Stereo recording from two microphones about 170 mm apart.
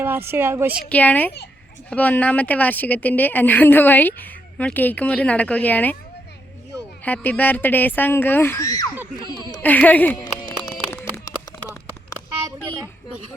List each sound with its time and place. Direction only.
0.0 s a woman's voice: 15° right (ahead or behind)
0.9 s speech: 10° left (ahead or behind)
7.0 s speech: 10° left (ahead or behind)
9.6 s speech: 10° left (ahead or behind)
10.8 s a sound: 15° left (ahead or behind)